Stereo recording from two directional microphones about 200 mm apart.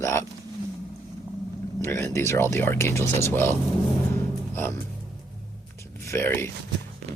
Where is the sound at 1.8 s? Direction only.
15° left (ahead or behind).